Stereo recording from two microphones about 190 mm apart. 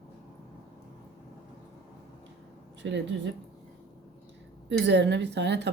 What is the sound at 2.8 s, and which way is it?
Speech, 65° right (ahead or behind).